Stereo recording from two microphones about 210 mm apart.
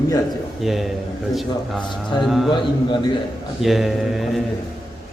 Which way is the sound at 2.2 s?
Centre (ahead or behind).